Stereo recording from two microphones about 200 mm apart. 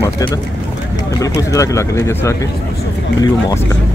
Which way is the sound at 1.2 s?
15° left (ahead or behind).